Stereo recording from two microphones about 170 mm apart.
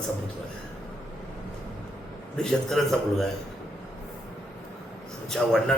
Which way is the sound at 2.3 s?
5° left (ahead or behind).